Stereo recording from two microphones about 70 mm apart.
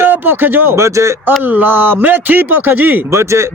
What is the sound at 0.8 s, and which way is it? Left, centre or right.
Speech, right.